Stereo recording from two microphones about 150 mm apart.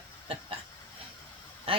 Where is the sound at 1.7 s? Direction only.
40° right (ahead or behind).